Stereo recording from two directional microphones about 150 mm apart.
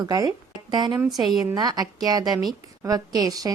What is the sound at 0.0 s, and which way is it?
Speech, 25° right (ahead or behind).